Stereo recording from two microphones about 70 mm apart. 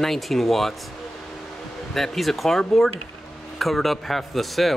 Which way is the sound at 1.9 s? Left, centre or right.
Centre.